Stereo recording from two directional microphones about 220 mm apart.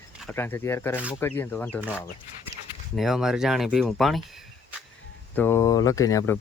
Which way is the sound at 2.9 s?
Centre (ahead or behind).